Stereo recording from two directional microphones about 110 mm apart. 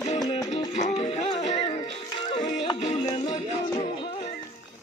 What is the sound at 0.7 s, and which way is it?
Music, 85° left.